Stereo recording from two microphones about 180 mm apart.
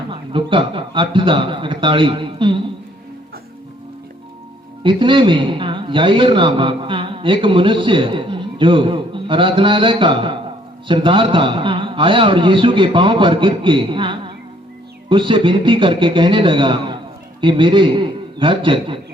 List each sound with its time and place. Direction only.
0.1 s a man's voice: 30° right (ahead or behind)
4.8 s a man's voice: 25° right (ahead or behind)